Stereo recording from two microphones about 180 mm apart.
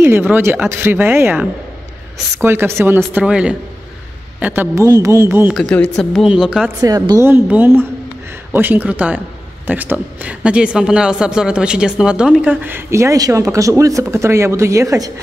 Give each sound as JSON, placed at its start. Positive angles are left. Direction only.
{"t": 0.0, "sound": "a woman's voice", "side_deg": -10}
{"t": 5.6, "sound": "a woman's voice", "side_deg": 5}
{"t": 6.8, "sound": "speech", "side_deg": -20}